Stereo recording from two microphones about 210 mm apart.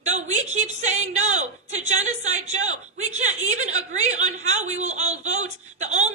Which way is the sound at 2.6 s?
80° right.